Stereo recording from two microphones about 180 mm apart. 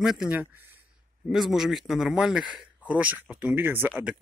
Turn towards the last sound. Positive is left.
turn(degrees=-10)  # may be behind; listen again after turning